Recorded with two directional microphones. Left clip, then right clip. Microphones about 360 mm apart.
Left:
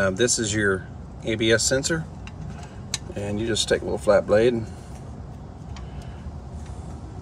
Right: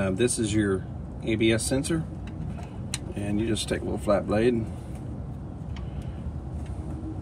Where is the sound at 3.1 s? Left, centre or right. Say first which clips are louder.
Left 2 dB; centre.